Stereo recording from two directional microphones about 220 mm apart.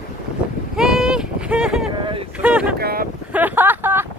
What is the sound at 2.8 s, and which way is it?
Speech, 45° right (ahead or behind).